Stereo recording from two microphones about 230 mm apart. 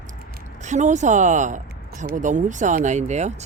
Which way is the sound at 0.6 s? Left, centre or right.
Right.